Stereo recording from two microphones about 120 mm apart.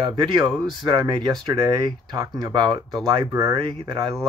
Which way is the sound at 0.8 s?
40° right (ahead or behind).